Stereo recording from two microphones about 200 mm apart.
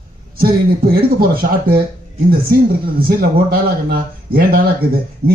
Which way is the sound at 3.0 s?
45° right (ahead or behind).